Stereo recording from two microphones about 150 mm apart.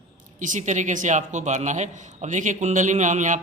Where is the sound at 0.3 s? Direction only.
60° right (ahead or behind).